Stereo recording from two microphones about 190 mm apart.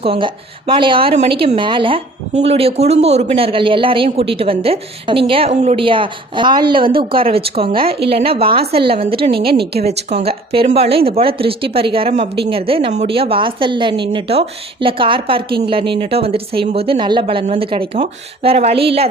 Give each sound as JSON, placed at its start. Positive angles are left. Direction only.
{"t": 0.0, "sound": "a woman's voice", "side_deg": -30}
{"t": 9.3, "sound": "a woman's voice", "side_deg": -55}
{"t": 9.8, "sound": "a woman's voice", "side_deg": -35}